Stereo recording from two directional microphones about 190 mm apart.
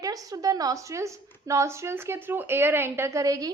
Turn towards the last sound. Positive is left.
turn(degrees=-20)  # may be behind; listen again after turning